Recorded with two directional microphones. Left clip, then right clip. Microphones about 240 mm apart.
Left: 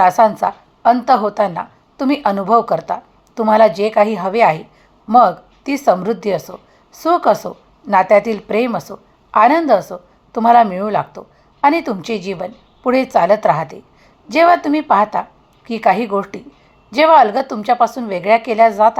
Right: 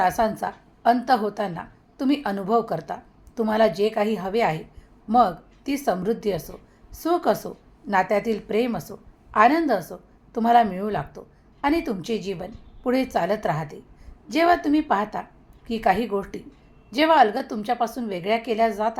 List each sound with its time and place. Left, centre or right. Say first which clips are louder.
0.0 s a woman's voice: left 11 dB; centre